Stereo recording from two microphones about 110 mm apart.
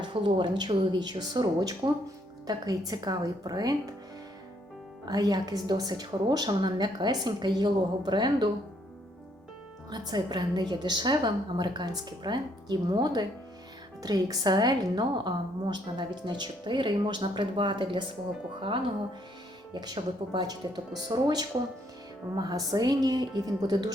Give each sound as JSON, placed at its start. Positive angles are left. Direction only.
{"t": 0.0, "sound": "a woman's voice", "side_deg": -50}
{"t": 5.0, "sound": "a woman's voice", "side_deg": -35}
{"t": 9.9, "sound": "a woman's voice", "side_deg": -40}
{"t": 19.7, "sound": "a woman's voice", "side_deg": -40}